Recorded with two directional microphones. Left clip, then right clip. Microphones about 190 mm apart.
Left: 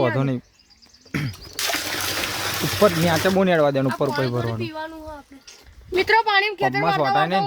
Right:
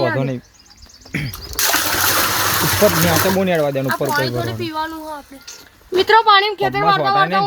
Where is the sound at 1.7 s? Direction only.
20° right (ahead or behind).